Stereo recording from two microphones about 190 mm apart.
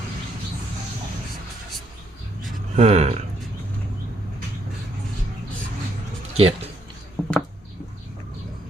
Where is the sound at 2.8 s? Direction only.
35° right (ahead or behind).